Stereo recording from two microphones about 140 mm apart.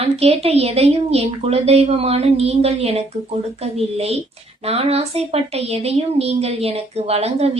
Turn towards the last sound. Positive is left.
turn(degrees=-45)  # may be behind; listen again after turning